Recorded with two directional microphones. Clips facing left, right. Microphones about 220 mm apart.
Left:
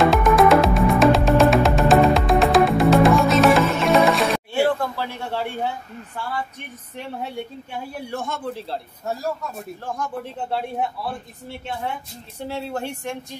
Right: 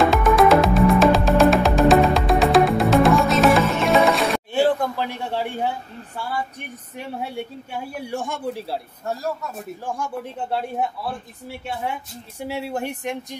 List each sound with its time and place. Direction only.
0.0 s music: centre (ahead or behind)
4.6 s a man's voice: 15° right (ahead or behind)
10.1 s speech: centre (ahead or behind)
12.4 s speech: 10° right (ahead or behind)